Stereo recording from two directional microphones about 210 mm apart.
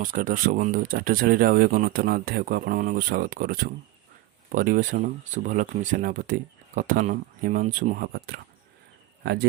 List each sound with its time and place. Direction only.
0.0 s speech: 40° right (ahead or behind)